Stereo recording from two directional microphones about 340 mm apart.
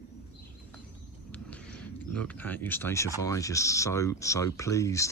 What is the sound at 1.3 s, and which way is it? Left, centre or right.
Speech, centre.